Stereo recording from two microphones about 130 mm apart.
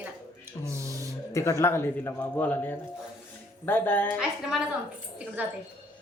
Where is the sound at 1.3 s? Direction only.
20° left (ahead or behind).